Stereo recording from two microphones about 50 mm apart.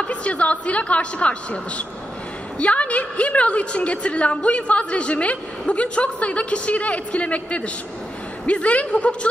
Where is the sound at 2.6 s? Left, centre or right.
Left.